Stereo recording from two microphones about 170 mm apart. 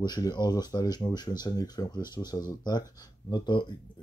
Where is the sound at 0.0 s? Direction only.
25° left (ahead or behind).